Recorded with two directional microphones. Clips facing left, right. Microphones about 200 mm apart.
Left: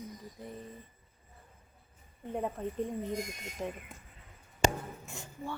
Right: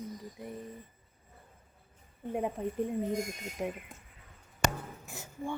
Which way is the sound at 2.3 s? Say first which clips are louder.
Right 2 dB; 10° right (ahead or behind).